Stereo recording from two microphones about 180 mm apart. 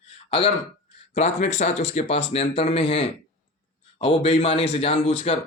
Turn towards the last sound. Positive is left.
turn(degrees=35)  # may be behind; listen again after turning